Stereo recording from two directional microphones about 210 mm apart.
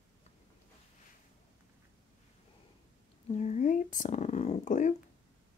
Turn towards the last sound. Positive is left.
turn(degrees=35)  # may be behind; listen again after turning